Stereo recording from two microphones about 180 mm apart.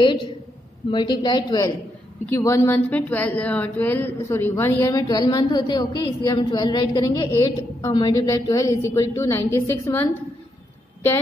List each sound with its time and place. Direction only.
0.8 s a woman's voice: 25° left (ahead or behind)